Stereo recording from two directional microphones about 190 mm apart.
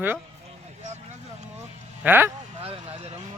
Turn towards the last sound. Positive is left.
turn(degrees=-30)  # may be behind; listen again after turning